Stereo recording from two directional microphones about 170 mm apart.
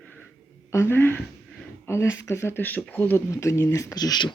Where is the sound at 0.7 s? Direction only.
15° left (ahead or behind).